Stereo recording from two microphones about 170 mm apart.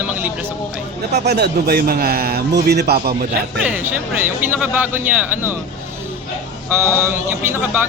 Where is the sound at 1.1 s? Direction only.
75° right (ahead or behind).